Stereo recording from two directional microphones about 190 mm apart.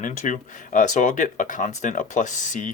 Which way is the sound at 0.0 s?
40° left (ahead or behind).